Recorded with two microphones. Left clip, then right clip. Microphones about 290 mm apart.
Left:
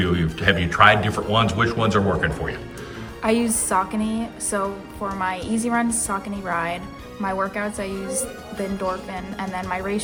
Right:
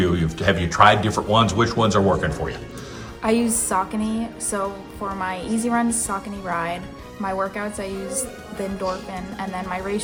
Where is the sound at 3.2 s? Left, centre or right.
Centre.